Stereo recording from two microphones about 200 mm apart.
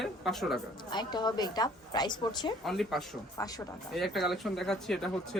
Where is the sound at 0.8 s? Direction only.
20° left (ahead or behind).